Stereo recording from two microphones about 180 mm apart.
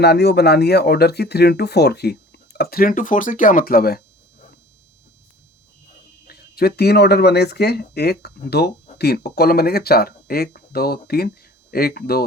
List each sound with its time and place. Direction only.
0.0 s speech: 65° left (ahead or behind)
6.2 s speech: 60° left (ahead or behind)